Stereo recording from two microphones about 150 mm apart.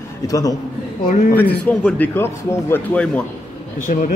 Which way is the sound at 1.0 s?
75° left (ahead or behind).